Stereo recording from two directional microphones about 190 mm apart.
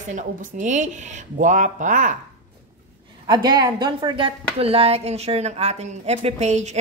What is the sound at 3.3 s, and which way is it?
A woman's voice, 20° right (ahead or behind).